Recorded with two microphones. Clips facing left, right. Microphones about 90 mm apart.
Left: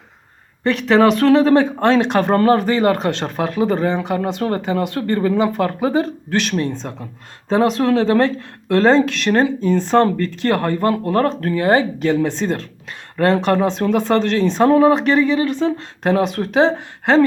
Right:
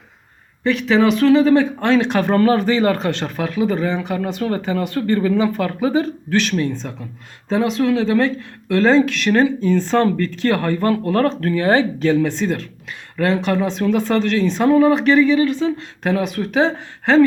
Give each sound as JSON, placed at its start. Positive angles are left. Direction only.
{"t": 0.6, "sound": "speech", "side_deg": 40}
{"t": 1.1, "sound": "speech", "side_deg": 50}
{"t": 2.6, "sound": "speech", "side_deg": 20}
{"t": 3.8, "sound": "speech", "side_deg": 25}
{"t": 6.3, "sound": "speech", "side_deg": 20}
{"t": 6.6, "sound": "speech", "side_deg": 30}
{"t": 7.5, "sound": "speech", "side_deg": 45}
{"t": 9.2, "sound": "speech", "side_deg": 25}
{"t": 10.0, "sound": "speech", "side_deg": 30}
{"t": 13.1, "sound": "speech", "side_deg": 40}
{"t": 14.7, "sound": "speech", "side_deg": 40}
{"t": 14.9, "sound": "speech", "side_deg": 30}
{"t": 16.2, "sound": "speech", "side_deg": 30}